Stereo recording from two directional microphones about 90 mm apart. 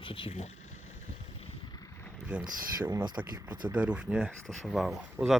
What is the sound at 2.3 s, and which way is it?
Speech, 15° right (ahead or behind).